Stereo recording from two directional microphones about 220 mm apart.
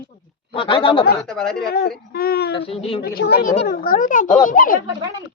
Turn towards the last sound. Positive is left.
turn(degrees=40)  # may be behind; listen again after turning